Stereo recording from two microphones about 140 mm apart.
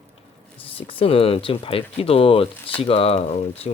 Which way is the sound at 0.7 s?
40° left (ahead or behind).